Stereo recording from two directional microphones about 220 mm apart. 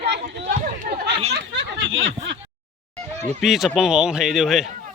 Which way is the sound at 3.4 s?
Centre (ahead or behind).